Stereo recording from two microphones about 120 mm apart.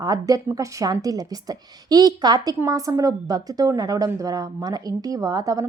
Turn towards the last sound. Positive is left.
turn(degrees=-30)  # may be behind; listen again after turning